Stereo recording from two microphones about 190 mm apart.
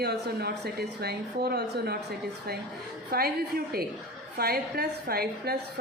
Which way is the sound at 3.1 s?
55° right (ahead or behind).